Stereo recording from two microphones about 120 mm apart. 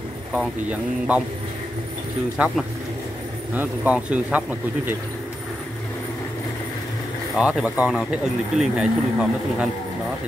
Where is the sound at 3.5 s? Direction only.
10° right (ahead or behind).